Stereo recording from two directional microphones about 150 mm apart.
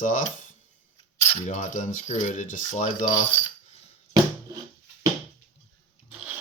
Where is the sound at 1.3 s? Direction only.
55° left (ahead or behind).